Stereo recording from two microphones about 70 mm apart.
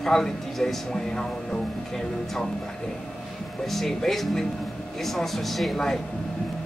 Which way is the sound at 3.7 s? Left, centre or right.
Centre.